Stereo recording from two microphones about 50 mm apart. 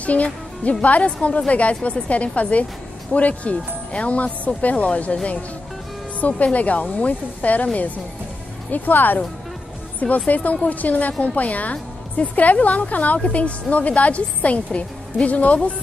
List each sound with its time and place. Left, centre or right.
0.0 s a woman's voice: left